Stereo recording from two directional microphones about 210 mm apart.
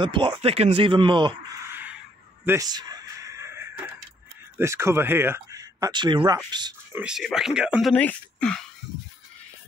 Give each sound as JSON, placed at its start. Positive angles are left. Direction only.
{"t": 0.0, "sound": "speech", "side_deg": -25}
{"t": 1.7, "sound": "crow", "side_deg": -10}
{"t": 2.4, "sound": "a sound", "side_deg": -15}
{"t": 4.6, "sound": "speech", "side_deg": -10}
{"t": 7.0, "sound": "speech", "side_deg": 0}
{"t": 7.9, "sound": "speech", "side_deg": 5}